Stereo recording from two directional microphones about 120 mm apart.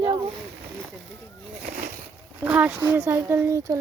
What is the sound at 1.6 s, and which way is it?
Speech, 90° right.